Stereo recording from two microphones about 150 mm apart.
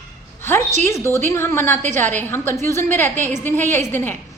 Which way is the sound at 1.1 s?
15° left (ahead or behind).